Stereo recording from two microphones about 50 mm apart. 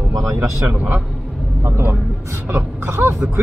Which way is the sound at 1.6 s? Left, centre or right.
Right.